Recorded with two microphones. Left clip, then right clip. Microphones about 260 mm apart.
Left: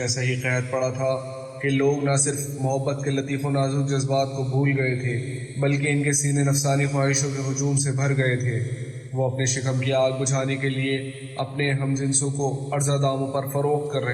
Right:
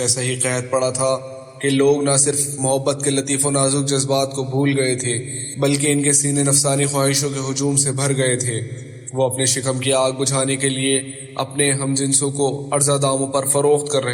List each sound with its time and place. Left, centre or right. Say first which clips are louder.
0.0 s a man's voice: right 5 dB; right